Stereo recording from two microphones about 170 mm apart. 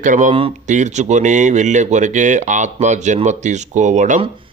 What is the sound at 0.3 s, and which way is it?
Speech, 35° right (ahead or behind).